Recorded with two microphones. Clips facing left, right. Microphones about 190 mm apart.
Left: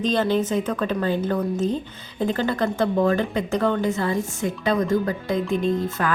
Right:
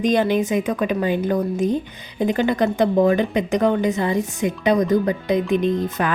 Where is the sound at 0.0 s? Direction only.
15° right (ahead or behind).